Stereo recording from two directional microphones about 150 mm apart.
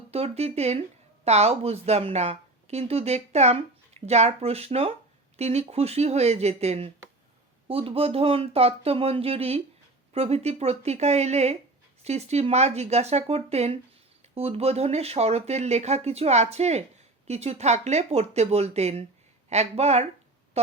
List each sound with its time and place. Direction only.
0.1 s a woman's voice: 45° right (ahead or behind)